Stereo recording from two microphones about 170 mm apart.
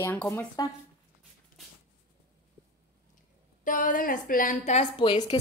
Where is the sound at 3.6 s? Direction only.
50° left (ahead or behind).